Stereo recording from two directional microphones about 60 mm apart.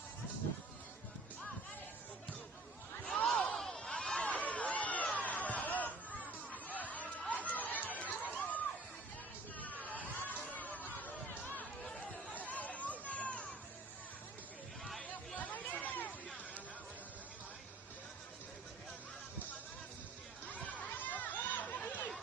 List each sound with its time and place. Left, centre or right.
3.2 s a sound: centre
4.3 s a sound: left
12.3 s run: left
14.8 s hubbub: centre
15.4 s chatter: left
20.6 s chatter: left